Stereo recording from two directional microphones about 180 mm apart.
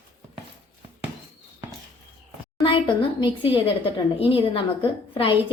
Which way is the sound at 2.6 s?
25° left (ahead or behind).